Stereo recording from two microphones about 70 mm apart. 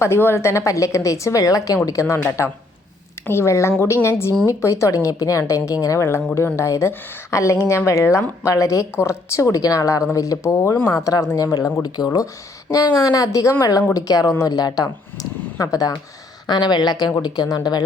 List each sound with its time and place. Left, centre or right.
0.0 s a woman's voice: left
16.5 s a woman's voice: left
17.2 s speech: left